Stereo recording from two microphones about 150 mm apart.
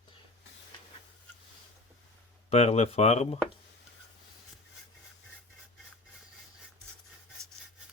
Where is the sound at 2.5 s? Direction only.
45° left (ahead or behind).